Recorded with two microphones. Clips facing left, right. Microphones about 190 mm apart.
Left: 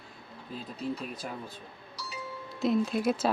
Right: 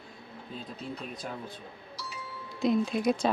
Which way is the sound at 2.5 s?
Centre (ahead or behind).